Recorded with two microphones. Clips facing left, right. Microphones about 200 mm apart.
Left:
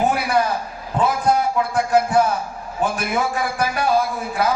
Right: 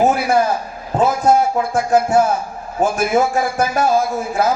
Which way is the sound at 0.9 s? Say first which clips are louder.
Right 4 dB; 45° right (ahead or behind).